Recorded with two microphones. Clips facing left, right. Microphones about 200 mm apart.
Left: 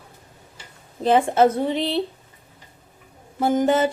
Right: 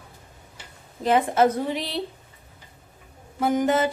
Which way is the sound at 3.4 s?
30° left (ahead or behind).